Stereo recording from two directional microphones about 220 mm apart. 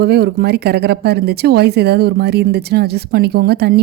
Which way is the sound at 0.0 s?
45° right (ahead or behind).